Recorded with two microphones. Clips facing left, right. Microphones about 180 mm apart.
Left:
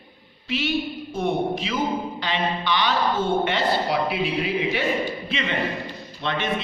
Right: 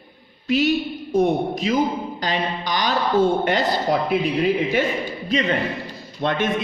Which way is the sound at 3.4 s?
40° right (ahead or behind).